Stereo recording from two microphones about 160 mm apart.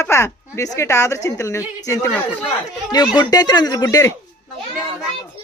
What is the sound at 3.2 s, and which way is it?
Speech, 25° left (ahead or behind).